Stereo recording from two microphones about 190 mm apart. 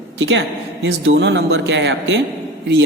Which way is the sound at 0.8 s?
85° right.